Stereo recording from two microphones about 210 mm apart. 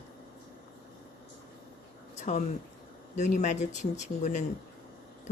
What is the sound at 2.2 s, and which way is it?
Speech, 35° left (ahead or behind).